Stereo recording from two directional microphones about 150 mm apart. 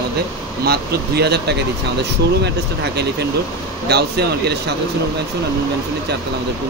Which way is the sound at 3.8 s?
90° right.